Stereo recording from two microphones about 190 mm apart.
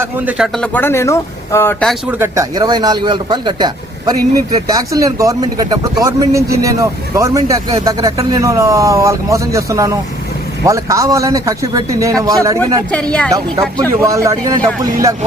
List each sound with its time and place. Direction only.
0.0 s speech: 5° right (ahead or behind); by 1.9 s 15° left (ahead or behind)
1.9 s speech: 10° right (ahead or behind)
12.9 s speech: 5° left (ahead or behind)
13.3 s speech: 20° right (ahead or behind)